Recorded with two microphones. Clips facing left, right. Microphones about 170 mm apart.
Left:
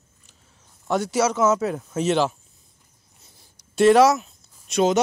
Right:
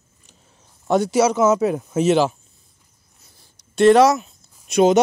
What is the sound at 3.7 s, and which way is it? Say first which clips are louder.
Speech: right 2 dB; 5° left (ahead or behind).